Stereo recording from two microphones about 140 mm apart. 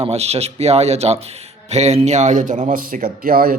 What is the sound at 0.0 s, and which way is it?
Speech, 50° right (ahead or behind).